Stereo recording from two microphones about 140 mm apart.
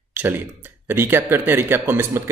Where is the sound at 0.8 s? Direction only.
15° right (ahead or behind).